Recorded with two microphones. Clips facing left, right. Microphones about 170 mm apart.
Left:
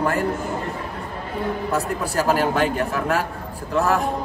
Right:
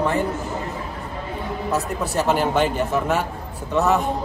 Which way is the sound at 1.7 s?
Centre (ahead or behind).